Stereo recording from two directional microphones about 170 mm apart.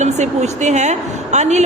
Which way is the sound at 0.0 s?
45° right (ahead or behind).